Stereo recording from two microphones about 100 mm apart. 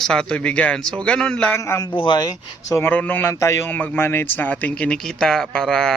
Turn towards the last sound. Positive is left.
turn(degrees=5)  # may be behind; listen again after turning